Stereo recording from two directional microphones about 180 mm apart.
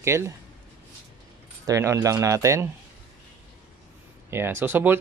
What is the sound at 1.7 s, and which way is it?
Speech, 15° right (ahead or behind).